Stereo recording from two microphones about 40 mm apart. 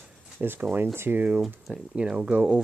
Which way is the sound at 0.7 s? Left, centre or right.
Right.